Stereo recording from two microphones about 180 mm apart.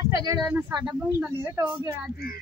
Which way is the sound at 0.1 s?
20° right (ahead or behind).